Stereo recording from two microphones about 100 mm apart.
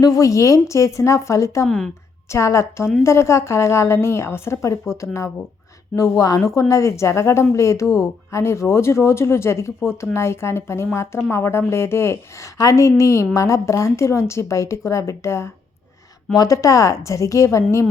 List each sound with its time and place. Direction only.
0.0 s speech: 35° left (ahead or behind)
1.6 s a woman's voice: 5° left (ahead or behind)
2.3 s speech: 30° left (ahead or behind)